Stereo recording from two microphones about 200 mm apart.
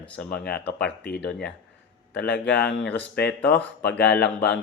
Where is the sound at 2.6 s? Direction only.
60° left (ahead or behind).